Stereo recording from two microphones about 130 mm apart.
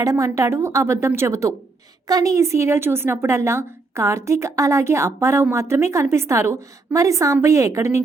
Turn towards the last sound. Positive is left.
turn(degrees=-20)  # may be behind; listen again after turning